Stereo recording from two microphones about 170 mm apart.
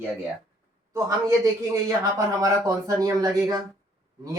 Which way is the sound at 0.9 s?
20° right (ahead or behind).